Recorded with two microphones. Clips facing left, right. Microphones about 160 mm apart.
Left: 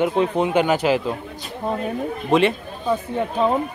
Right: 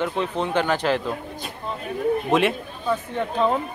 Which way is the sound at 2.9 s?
10° left (ahead or behind).